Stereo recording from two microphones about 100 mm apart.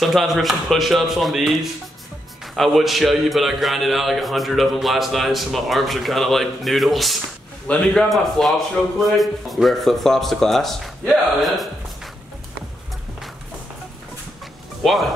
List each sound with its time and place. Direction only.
0.0 s a man's voice: centre (ahead or behind)
14.8 s speech: centre (ahead or behind)